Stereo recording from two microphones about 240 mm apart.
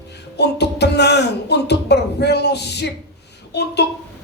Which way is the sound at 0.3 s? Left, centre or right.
Left.